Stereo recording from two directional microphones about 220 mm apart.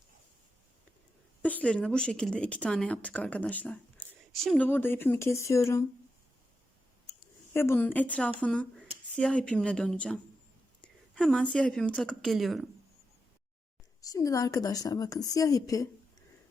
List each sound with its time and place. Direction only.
1.4 s speech: 5° left (ahead or behind)
7.5 s a woman's voice: 10° left (ahead or behind)
14.0 s a woman's voice: 15° left (ahead or behind)